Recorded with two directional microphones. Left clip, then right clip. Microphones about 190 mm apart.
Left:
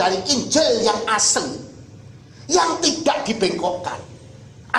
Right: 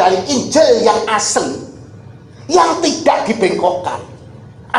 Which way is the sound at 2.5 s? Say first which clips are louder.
Right 6 dB; 30° left (ahead or behind).